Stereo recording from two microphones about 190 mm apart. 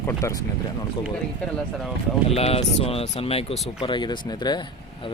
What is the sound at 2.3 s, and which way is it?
Speech, 30° left (ahead or behind).